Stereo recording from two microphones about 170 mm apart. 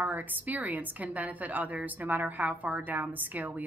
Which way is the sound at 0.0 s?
10° right (ahead or behind).